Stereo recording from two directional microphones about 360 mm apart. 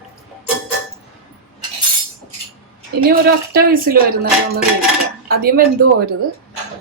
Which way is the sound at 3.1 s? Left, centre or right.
Right.